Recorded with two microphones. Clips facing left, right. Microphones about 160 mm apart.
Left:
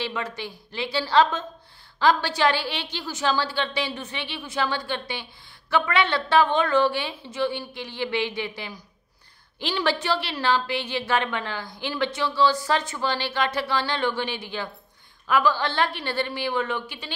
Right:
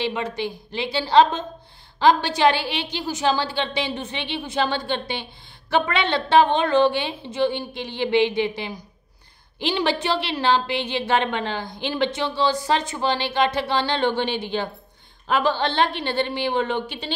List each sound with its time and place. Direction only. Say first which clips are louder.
0.0 s a woman's voice: right 5 dB; 20° right (ahead or behind)